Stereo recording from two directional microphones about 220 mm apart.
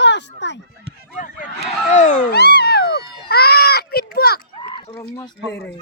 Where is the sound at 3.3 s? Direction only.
45° left (ahead or behind).